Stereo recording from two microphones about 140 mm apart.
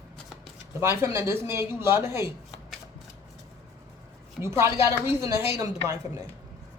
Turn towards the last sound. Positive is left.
turn(degrees=-25)  # may be behind; listen again after turning